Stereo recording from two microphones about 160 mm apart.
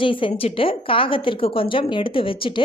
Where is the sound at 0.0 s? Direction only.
30° left (ahead or behind).